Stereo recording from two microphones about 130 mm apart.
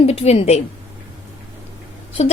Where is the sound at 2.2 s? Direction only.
55° left (ahead or behind).